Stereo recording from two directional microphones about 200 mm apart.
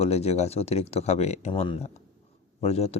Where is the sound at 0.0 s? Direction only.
30° left (ahead or behind).